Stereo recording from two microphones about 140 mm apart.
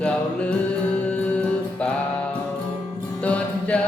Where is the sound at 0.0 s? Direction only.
10° left (ahead or behind).